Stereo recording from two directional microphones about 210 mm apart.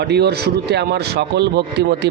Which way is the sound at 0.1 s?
50° right (ahead or behind).